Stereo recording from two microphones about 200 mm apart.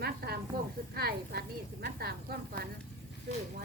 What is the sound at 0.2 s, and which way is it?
A woman's voice, 55° right (ahead or behind).